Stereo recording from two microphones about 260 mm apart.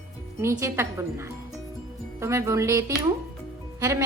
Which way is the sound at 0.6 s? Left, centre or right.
Centre.